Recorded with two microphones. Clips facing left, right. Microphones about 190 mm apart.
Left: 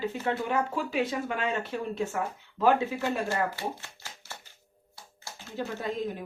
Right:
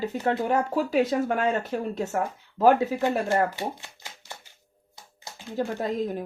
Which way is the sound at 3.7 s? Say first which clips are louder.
Right 1 dB; 15° right (ahead or behind).